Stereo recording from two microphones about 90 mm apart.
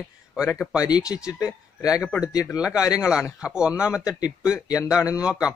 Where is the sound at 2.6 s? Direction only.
10° right (ahead or behind).